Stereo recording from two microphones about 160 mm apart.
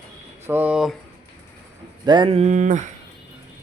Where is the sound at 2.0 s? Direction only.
30° right (ahead or behind); by 2.9 s 50° right (ahead or behind).